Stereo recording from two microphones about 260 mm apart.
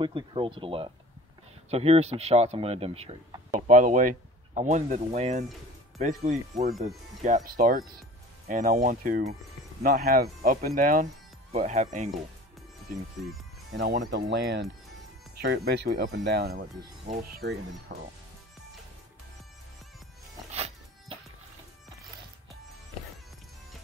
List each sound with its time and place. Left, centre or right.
0.0 s speech: centre
13.7 s speech: right
17.4 s speech: right
20.5 s music: right